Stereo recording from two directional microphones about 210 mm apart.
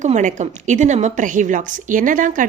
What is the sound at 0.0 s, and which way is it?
A woman's voice, 35° right (ahead or behind).